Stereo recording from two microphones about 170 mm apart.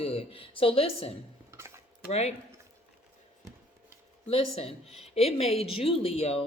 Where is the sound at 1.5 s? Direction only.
15° right (ahead or behind).